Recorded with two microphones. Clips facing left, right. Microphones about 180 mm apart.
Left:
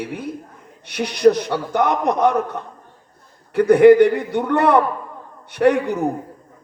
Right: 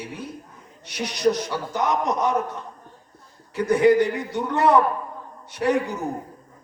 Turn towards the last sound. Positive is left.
turn(degrees=60)  # may be behind; listen again after turning